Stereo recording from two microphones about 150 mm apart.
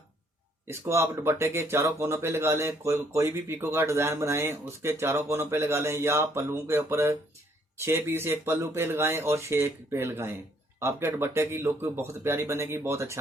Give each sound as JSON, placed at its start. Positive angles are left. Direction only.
{"t": 0.7, "sound": "speech", "side_deg": -20}